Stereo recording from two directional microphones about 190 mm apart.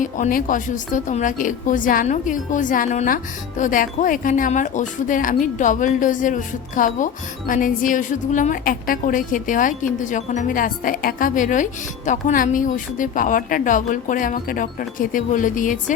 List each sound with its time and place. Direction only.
0.0 s speech: 45° left (ahead or behind)